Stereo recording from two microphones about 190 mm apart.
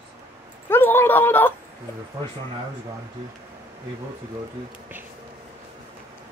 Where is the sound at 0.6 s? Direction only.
10° left (ahead or behind).